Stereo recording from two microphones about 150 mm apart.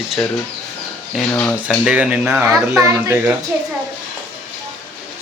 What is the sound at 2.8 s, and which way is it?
Speech, 20° right (ahead or behind).